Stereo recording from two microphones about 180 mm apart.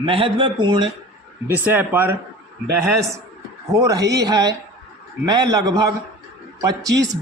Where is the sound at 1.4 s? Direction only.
10° right (ahead or behind).